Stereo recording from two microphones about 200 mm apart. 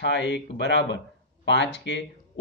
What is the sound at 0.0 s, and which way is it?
A man's voice, 60° left (ahead or behind).